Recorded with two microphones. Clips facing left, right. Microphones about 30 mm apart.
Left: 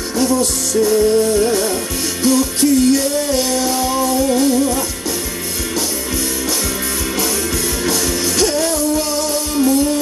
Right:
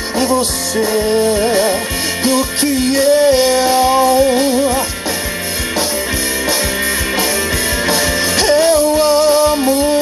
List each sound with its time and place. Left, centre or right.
0.2 s music: right
7.8 s music: right